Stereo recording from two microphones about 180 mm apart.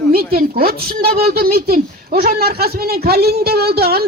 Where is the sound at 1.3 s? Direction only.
55° right (ahead or behind).